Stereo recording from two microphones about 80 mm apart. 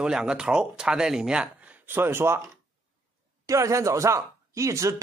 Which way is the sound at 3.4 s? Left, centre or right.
Right.